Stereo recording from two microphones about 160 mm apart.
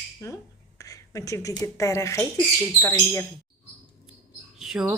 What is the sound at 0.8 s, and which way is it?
Speech, 20° left (ahead or behind).